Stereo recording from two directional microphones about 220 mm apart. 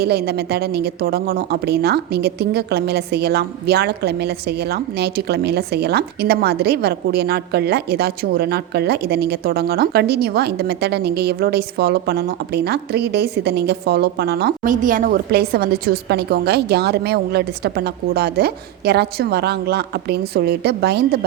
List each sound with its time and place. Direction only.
0.0 s speech: 45° right (ahead or behind)